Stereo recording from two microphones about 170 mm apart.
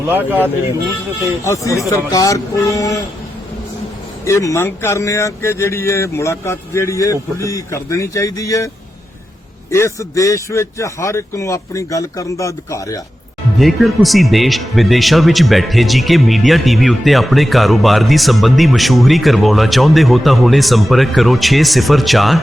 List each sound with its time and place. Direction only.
0.1 s speech: 10° right (ahead or behind)
1.5 s a sound: 20° left (ahead or behind)
4.3 s speech: 15° left (ahead or behind)
13.6 s speech: centre (ahead or behind)